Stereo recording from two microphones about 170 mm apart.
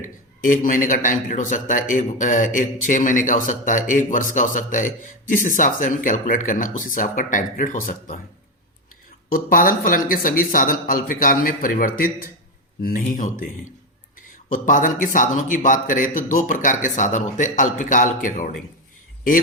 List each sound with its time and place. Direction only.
0.0 s a man's voice: 55° left (ahead or behind)
9.3 s a man's voice: 55° left (ahead or behind)